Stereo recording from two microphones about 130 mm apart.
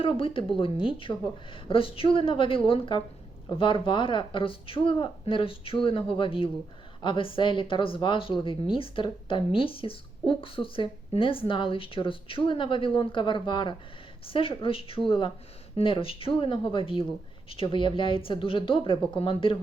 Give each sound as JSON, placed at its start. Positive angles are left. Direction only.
{"t": 0.0, "sound": "a woman's voice", "side_deg": 45}